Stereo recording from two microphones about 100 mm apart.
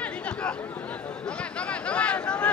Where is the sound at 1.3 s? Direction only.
10° left (ahead or behind).